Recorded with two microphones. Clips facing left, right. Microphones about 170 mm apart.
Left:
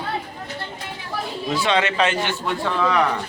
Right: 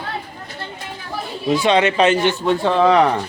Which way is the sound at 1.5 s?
20° right (ahead or behind).